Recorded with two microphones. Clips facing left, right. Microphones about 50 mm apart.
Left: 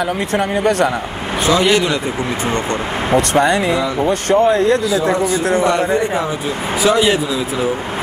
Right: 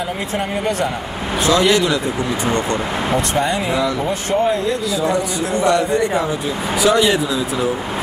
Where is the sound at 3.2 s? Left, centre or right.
Left.